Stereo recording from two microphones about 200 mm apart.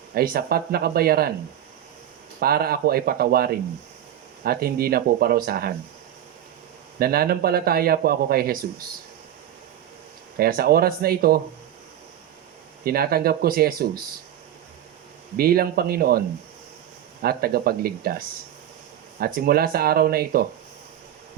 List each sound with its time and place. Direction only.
0.1 s speech: 50° right (ahead or behind)
2.4 s speech: 50° right (ahead or behind)
7.0 s speech: 50° right (ahead or behind)
10.3 s speech: 50° right (ahead or behind)
12.8 s speech: 50° right (ahead or behind)
15.4 s speech: 50° right (ahead or behind)
17.2 s speech: 50° right (ahead or behind)
19.2 s speech: 50° right (ahead or behind)